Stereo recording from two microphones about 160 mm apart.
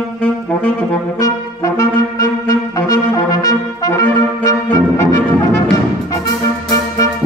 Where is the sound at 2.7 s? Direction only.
25° left (ahead or behind).